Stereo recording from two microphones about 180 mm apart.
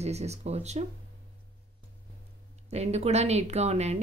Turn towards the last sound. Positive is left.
turn(degrees=-40)  # may be behind; listen again after turning